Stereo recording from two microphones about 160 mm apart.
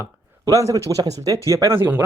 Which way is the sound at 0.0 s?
20° right (ahead or behind).